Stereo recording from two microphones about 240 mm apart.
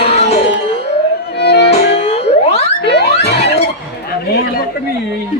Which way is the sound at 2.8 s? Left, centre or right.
Left.